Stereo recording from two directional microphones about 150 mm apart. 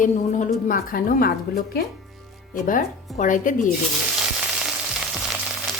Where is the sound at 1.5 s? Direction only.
85° left.